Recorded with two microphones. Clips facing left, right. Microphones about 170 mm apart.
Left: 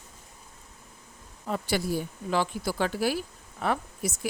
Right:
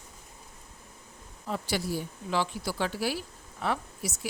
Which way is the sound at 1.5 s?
55° left (ahead or behind).